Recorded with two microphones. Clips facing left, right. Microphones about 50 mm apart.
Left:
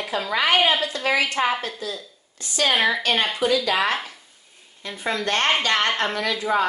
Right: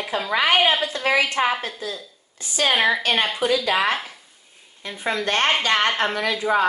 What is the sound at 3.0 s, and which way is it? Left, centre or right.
Speech, centre.